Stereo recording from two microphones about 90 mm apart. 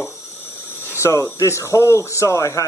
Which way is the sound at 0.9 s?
30° left (ahead or behind).